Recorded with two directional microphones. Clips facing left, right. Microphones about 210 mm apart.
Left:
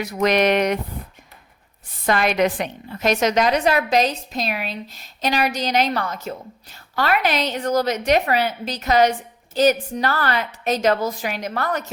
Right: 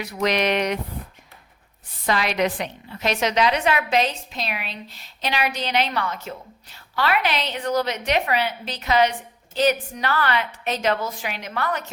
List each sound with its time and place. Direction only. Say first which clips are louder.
0.0 s a woman's voice: left 4 dB; 45° left (ahead or behind)
2.0 s a woman's voice: left 3 dB; 50° left (ahead or behind)